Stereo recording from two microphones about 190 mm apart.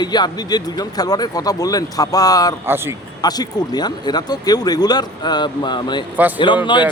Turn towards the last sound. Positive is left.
turn(degrees=25)  # may be behind; listen again after turning